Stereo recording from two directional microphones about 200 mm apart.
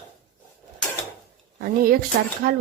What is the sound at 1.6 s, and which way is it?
Speech, 45° right (ahead or behind).